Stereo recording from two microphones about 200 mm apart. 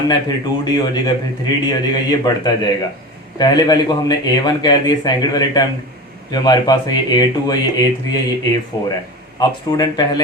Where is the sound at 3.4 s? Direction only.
20° left (ahead or behind).